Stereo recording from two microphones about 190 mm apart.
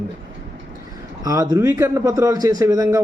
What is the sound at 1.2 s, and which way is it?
A man's voice, 20° right (ahead or behind).